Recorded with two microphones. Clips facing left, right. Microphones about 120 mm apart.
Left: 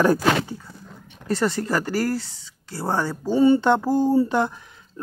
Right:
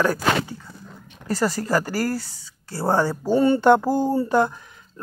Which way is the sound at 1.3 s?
5° right (ahead or behind).